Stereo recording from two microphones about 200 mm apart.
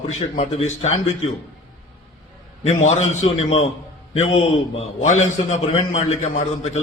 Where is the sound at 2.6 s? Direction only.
35° left (ahead or behind).